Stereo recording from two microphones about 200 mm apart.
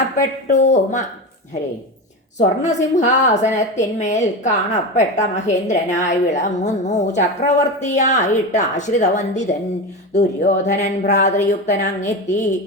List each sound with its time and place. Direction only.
0.2 s a woman's voice: 35° left (ahead or behind)
2.6 s a woman's voice: 35° left (ahead or behind)